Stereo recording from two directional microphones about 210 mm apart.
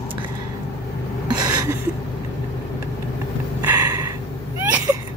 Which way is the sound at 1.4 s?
20° right (ahead or behind).